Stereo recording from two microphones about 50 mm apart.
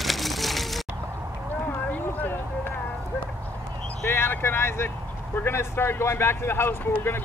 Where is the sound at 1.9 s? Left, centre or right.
Left.